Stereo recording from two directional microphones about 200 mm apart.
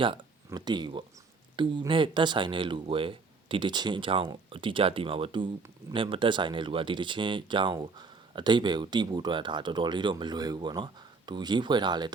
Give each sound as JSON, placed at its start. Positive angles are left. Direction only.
{"t": 0.0, "sound": "speech", "side_deg": -25}